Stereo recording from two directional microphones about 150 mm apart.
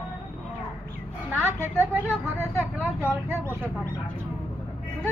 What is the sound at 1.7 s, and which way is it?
Speech, 15° right (ahead or behind).